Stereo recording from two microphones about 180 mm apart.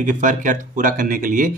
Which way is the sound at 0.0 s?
45° right (ahead or behind).